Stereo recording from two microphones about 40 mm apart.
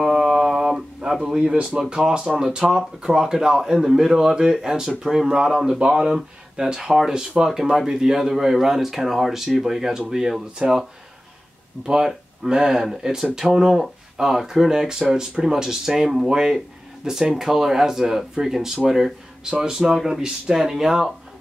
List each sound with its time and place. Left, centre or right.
0.0 s mantra: centre
1.2 s speech: centre
5.8 s speech: right
11.8 s speech: centre